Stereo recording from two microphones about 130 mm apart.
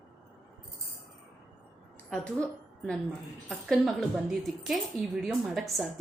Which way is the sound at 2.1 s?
10° left (ahead or behind).